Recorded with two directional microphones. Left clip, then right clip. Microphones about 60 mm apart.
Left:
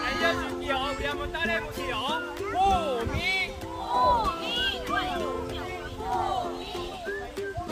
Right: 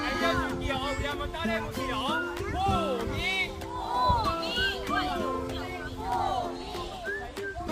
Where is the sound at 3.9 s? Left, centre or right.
Right.